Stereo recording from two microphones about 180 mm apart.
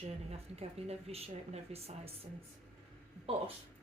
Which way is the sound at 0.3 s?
35° right (ahead or behind).